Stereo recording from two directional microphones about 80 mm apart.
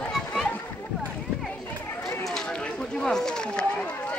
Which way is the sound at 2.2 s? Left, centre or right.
Centre.